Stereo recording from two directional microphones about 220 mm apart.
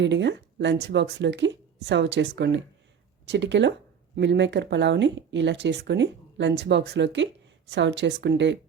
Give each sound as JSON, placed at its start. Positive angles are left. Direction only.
{"t": 0.0, "sound": "speech", "side_deg": -55}